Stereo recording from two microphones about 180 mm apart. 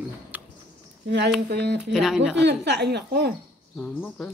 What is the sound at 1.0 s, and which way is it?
Speech, 70° right (ahead or behind).